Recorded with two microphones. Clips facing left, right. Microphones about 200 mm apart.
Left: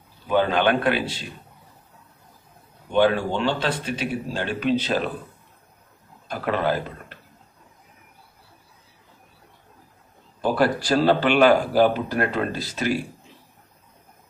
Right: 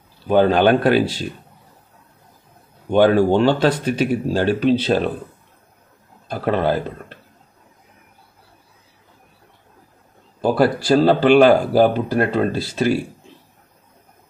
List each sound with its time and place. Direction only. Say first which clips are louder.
0.3 s speech: right 6 dB; 35° right (ahead or behind)
2.9 s speech: right 6 dB; 45° right (ahead or behind)
6.2 s speech: right 4 dB; 30° right (ahead or behind)
10.4 s speech: right 4 dB; 30° right (ahead or behind)